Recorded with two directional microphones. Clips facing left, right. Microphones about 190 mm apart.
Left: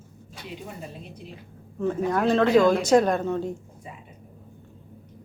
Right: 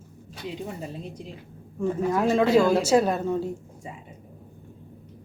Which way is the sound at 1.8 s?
10° right (ahead or behind).